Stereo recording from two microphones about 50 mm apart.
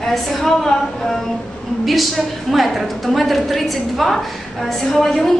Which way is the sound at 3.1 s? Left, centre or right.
Centre.